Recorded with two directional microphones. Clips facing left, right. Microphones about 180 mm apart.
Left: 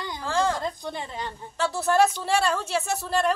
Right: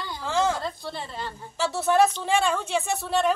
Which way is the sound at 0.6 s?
15° left (ahead or behind).